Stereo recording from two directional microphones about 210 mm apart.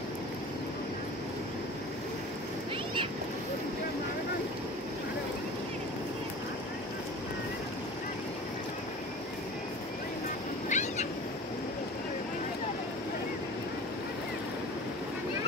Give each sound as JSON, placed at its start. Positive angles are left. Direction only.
{"t": 10.7, "sound": "cat", "side_deg": 35}